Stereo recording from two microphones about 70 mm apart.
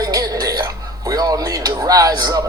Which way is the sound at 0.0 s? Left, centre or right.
Right.